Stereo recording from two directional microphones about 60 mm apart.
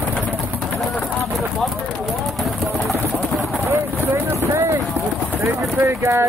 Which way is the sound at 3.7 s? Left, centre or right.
Right.